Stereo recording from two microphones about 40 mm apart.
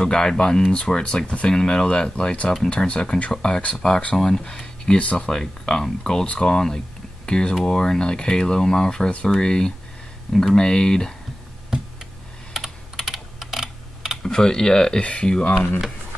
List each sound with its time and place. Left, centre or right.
0.0 s speech: centre
1.5 s speech: centre
4.9 s speech: left
12.5 s computer keyboard: centre
14.2 s speech: centre
15.5 s speech: left